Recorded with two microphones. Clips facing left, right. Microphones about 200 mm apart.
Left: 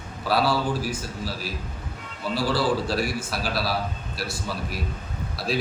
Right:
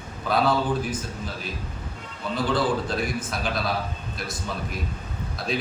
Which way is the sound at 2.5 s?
5° left (ahead or behind).